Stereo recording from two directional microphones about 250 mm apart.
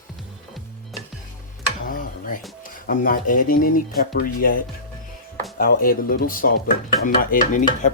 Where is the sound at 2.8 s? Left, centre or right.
Left.